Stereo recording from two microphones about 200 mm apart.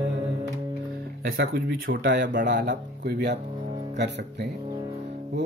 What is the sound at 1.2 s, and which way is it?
Speech, 50° right (ahead or behind).